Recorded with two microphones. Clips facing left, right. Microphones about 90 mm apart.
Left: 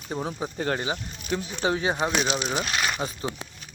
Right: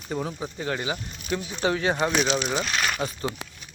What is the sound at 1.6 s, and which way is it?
Speech, 20° left (ahead or behind).